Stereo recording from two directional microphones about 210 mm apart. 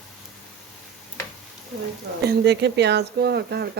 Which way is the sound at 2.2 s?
55° right (ahead or behind).